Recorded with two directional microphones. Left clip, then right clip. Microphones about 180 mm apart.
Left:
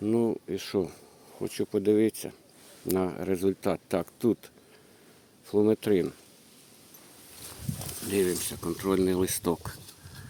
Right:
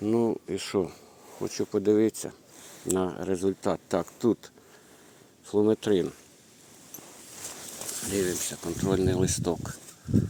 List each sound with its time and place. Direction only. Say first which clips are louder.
0.0 s speech: right 1 dB; 20° left (ahead or behind)
8.1 s speech: left 2 dB; 30° left (ahead or behind)